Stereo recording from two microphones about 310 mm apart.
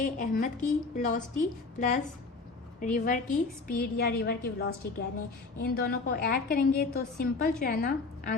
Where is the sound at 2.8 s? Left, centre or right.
Left.